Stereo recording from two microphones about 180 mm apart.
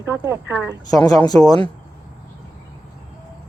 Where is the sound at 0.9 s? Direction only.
20° left (ahead or behind).